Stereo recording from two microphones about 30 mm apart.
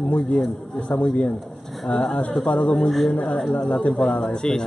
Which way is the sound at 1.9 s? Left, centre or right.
Left.